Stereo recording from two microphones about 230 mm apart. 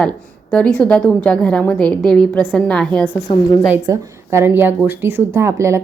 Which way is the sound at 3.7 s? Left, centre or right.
Centre.